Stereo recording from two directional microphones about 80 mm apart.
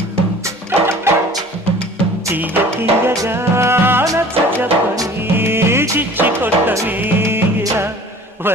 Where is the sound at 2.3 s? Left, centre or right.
Right.